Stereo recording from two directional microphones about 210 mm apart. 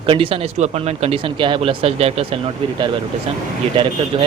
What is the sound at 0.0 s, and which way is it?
Speech, 25° right (ahead or behind).